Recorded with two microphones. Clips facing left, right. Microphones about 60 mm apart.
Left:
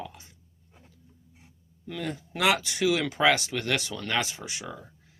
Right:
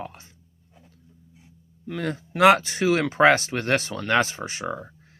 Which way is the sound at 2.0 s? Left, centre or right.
Right.